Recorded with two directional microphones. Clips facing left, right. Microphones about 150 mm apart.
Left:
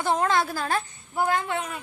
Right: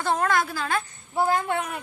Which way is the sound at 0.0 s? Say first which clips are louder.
Even; 20° left (ahead or behind).